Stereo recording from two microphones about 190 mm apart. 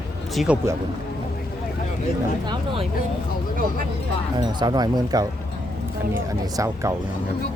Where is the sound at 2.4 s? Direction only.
20° right (ahead or behind).